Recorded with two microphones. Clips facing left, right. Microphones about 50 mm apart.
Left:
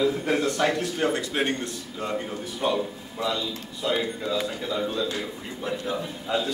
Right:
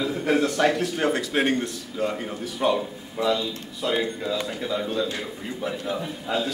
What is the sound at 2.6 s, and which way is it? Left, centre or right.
Speech, centre.